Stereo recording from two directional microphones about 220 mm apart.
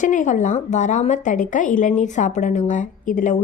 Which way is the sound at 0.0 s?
35° left (ahead or behind).